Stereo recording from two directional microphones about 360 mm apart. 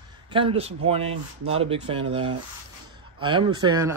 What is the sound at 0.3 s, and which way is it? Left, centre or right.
Speech, centre.